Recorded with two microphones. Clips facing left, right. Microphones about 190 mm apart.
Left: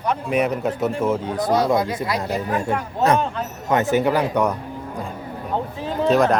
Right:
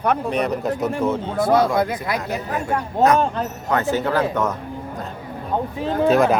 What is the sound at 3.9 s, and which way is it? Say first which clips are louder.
Speech: left 2 dB; 15° left (ahead or behind).